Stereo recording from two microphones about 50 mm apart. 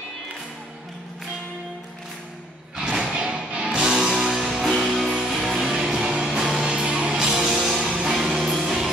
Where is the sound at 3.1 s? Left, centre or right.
Right.